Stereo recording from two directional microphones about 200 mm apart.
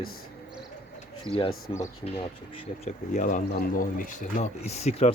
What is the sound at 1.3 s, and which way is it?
Speech, 25° left (ahead or behind).